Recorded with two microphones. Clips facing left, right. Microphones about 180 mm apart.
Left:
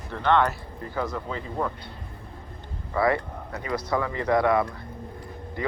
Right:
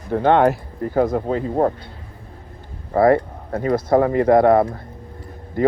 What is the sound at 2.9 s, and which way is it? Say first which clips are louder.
Speech: right 9 dB; 50° right (ahead or behind).